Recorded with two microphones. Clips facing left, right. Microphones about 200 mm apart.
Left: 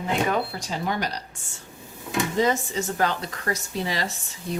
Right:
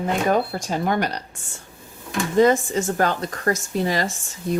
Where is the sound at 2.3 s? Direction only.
50° right (ahead or behind).